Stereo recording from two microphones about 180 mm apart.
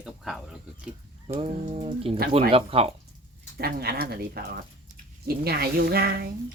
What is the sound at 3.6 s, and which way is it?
Speech, 60° right (ahead or behind).